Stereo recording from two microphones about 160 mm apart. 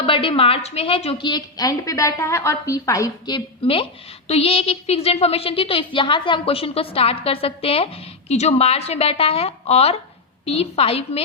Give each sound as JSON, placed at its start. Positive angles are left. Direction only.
{"t": 0.0, "sound": "a woman's voice", "side_deg": 35}